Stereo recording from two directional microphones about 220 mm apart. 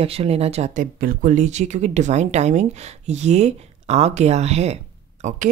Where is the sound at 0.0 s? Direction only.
25° right (ahead or behind).